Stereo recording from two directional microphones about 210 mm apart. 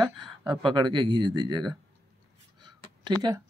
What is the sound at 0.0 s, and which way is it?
Speech, 20° right (ahead or behind).